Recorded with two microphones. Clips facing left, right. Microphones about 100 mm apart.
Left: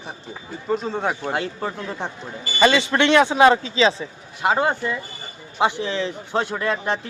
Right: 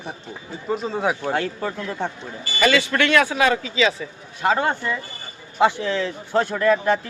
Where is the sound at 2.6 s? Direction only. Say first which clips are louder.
Left 2 dB; 25° left (ahead or behind).